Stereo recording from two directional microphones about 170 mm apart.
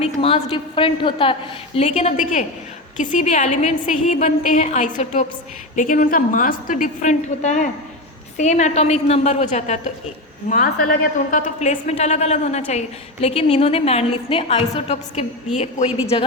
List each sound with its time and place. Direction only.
0.0 s a sound: 35° left (ahead or behind)
0.5 s a woman's voice: 30° left (ahead or behind)
10.5 s a woman's voice: 55° left (ahead or behind)